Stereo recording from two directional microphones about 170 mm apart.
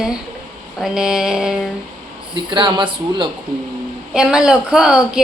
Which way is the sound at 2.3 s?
30° right (ahead or behind).